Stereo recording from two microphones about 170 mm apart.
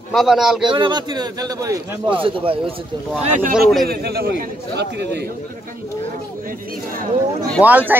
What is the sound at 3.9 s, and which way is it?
Speech, 65° right (ahead or behind).